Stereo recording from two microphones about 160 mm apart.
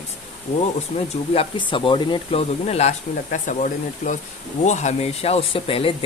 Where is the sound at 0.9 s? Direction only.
40° left (ahead or behind).